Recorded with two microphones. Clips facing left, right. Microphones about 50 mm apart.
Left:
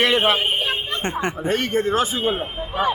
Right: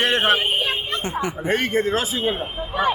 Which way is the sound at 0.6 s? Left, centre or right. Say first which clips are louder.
Left 1 dB; left.